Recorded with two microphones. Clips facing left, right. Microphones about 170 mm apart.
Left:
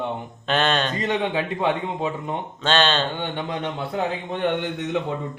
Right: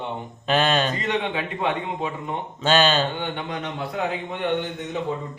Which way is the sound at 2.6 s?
10° right (ahead or behind).